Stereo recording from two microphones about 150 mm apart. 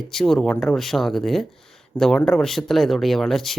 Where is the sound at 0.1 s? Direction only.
Centre (ahead or behind).